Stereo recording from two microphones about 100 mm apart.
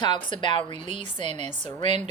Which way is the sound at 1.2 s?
90° right.